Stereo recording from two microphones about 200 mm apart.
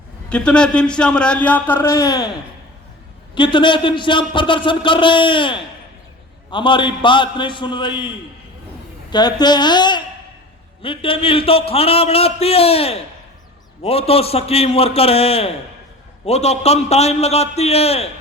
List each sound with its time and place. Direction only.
0.3 s speech: 5° left (ahead or behind)
3.3 s a man's voice: 25° left (ahead or behind)
9.0 s a man's voice: 20° left (ahead or behind)